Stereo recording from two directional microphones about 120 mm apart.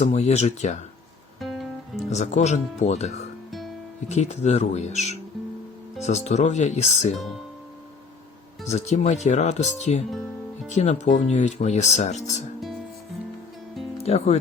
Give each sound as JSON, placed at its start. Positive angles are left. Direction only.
{"t": 0.0, "sound": "speech", "side_deg": 70}
{"t": 1.4, "sound": "music", "side_deg": 0}
{"t": 2.0, "sound": "speech", "side_deg": 75}
{"t": 8.6, "sound": "speech", "side_deg": 70}
{"t": 14.0, "sound": "speech", "side_deg": 60}